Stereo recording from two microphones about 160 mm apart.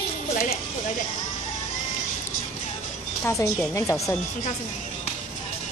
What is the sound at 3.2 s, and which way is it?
Speech, 20° left (ahead or behind).